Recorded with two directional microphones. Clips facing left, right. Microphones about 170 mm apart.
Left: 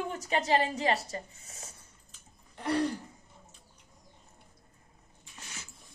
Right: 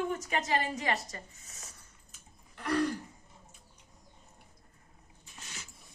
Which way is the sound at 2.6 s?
30° left (ahead or behind).